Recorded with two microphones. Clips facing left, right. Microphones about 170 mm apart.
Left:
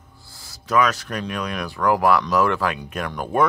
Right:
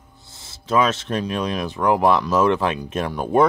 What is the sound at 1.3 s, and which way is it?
Speech, 25° right (ahead or behind).